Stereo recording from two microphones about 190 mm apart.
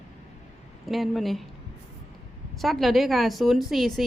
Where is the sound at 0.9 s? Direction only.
Centre (ahead or behind).